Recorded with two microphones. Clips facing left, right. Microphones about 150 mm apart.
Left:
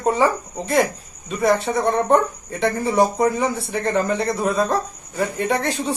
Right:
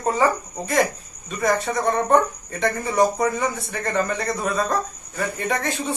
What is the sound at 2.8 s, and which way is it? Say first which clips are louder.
Speech: left 2 dB; 25° left (ahead or behind).